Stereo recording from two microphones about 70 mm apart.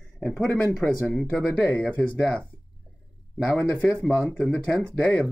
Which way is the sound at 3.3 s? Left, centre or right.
Centre.